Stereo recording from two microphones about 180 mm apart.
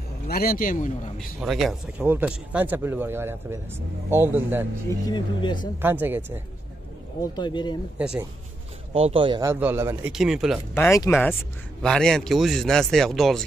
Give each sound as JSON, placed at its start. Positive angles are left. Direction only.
{"t": 0.3, "sound": "a man's voice", "side_deg": 55}
{"t": 1.1, "sound": "speech", "side_deg": 0}
{"t": 4.8, "sound": "speech", "side_deg": 25}
{"t": 5.8, "sound": "speech", "side_deg": -10}
{"t": 7.2, "sound": "speech", "side_deg": 25}
{"t": 8.9, "sound": "speech", "side_deg": -30}
{"t": 9.4, "sound": "speech", "side_deg": -10}
{"t": 10.7, "sound": "speech", "side_deg": 15}